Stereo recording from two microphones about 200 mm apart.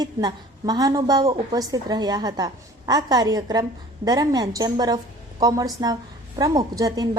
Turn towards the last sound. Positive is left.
turn(degrees=-20)  # may be behind; listen again after turning